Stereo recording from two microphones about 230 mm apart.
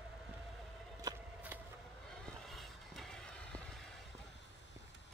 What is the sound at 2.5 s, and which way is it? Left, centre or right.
Vehicle, centre.